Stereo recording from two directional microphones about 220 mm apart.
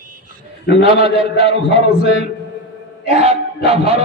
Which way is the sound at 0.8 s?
25° right (ahead or behind).